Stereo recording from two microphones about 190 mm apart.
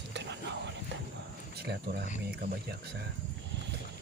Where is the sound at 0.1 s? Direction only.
65° right (ahead or behind).